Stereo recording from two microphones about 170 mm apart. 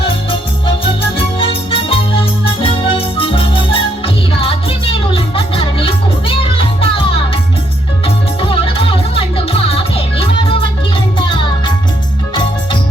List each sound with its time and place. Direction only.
0.0 s music: 30° left (ahead or behind)
1.4 s music: 30° left (ahead or behind)